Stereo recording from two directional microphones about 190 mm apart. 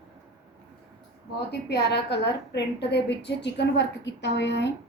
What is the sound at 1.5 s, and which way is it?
A woman's voice, 60° left (ahead or behind).